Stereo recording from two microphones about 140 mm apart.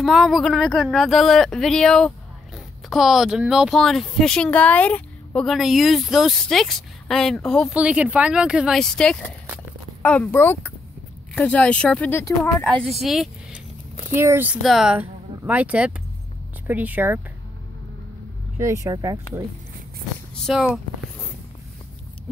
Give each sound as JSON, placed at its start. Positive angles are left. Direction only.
{"t": 0.0, "sound": "speech", "side_deg": 0}
{"t": 7.7, "sound": "speech", "side_deg": -10}
{"t": 13.0, "sound": "speech", "side_deg": 0}
{"t": 14.1, "sound": "speech", "side_deg": -15}
{"t": 14.6, "sound": "speech", "side_deg": 0}
{"t": 18.6, "sound": "speech", "side_deg": -20}
{"t": 20.3, "sound": "a sound", "side_deg": 0}